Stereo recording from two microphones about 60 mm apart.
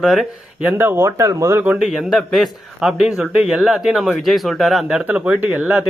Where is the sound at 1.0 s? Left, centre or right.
Right.